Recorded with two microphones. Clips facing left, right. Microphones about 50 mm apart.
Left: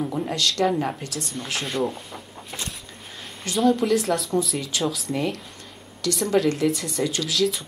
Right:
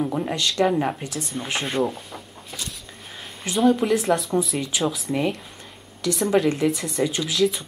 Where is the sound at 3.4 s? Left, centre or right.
Centre.